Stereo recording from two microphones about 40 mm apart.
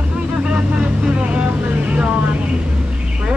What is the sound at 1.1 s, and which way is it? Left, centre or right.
Speech, right.